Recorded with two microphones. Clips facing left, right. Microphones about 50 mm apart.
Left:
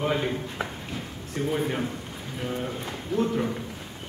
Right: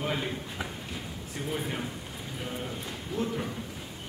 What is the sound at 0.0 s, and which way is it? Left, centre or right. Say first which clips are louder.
Speech: left 6 dB; centre.